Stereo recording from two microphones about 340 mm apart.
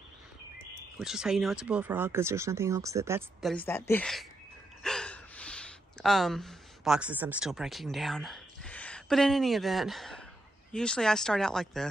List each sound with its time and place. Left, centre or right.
0.9 s speech: centre
4.8 s gasp: centre
10.7 s speech: centre